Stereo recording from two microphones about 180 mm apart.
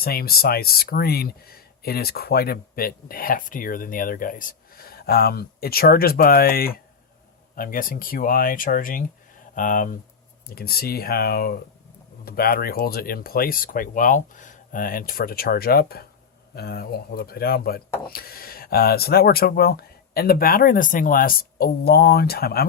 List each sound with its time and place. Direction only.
0.0 s speech: 60° left (ahead or behind)